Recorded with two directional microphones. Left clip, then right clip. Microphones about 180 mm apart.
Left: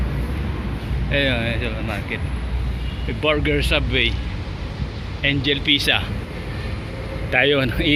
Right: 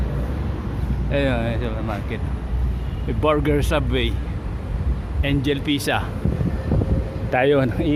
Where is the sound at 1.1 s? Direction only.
10° right (ahead or behind).